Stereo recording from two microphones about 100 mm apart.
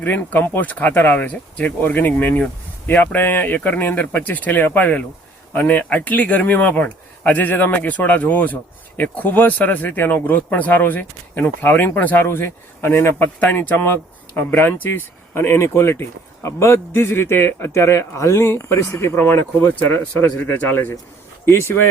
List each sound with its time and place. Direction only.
0.0 s speech: 15° left (ahead or behind)